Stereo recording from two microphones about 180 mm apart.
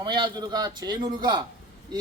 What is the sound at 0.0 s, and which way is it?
A man's voice, 25° right (ahead or behind).